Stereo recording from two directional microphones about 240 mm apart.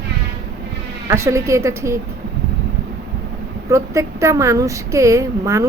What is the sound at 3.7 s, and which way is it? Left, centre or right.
A woman's voice, centre.